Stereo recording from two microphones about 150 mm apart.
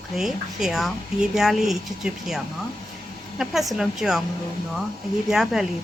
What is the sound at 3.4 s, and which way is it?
Speech, centre (ahead or behind).